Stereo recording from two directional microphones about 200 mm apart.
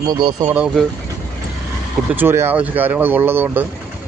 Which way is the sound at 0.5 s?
5° right (ahead or behind).